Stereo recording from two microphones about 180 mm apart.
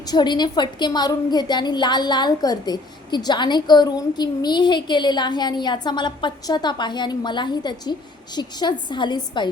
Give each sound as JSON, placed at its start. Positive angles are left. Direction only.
{"t": 0.0, "sound": "a woman's voice", "side_deg": 20}